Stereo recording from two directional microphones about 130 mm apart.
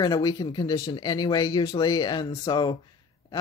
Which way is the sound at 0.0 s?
30° left (ahead or behind).